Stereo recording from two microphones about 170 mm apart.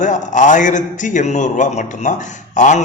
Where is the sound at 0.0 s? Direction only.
45° left (ahead or behind).